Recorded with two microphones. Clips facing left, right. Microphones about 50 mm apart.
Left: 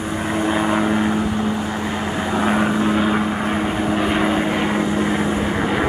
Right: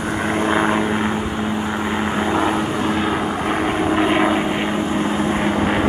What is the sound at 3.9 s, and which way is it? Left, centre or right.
Vehicle, right.